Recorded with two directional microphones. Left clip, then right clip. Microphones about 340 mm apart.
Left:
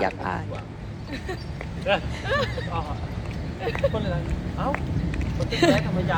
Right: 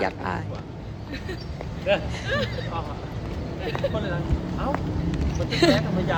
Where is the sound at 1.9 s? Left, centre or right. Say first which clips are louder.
Even; centre.